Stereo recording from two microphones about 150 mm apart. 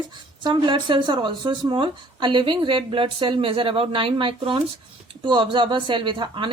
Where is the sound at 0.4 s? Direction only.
30° right (ahead or behind).